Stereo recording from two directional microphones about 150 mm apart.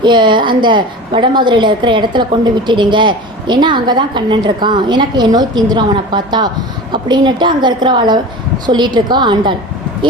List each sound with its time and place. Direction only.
0.0 s a woman's voice: 30° right (ahead or behind)